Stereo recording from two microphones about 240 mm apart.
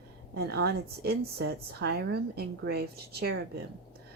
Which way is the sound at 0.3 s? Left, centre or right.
Right.